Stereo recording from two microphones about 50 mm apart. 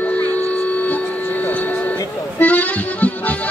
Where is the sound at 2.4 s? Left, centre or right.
Left.